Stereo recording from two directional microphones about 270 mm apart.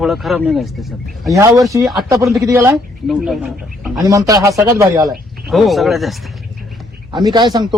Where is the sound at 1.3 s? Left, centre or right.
Centre.